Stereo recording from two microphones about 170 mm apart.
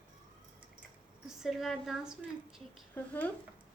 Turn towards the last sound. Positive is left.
turn(degrees=10)  # may be behind; listen again after turning